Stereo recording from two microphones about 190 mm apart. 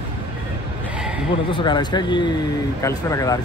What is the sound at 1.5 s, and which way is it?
Speech, 25° left (ahead or behind).